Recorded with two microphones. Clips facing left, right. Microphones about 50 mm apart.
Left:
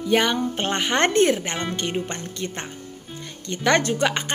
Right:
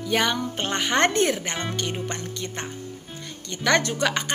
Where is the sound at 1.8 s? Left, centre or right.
Left.